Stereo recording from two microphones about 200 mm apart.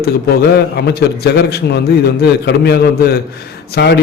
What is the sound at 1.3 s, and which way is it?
A man's voice, 55° left (ahead or behind).